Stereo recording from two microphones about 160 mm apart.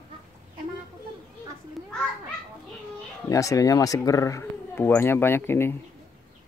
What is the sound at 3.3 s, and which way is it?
Speech, 20° left (ahead or behind).